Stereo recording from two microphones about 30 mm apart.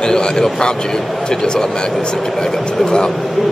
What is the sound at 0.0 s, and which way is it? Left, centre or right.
Speech, left.